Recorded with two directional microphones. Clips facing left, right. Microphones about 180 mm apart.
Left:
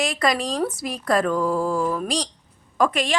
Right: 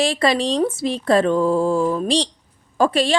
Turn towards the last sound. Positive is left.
turn(degrees=-30)  # may be behind; listen again after turning